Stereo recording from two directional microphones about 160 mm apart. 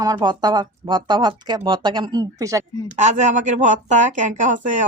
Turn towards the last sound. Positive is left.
turn(degrees=-50)  # may be behind; listen again after turning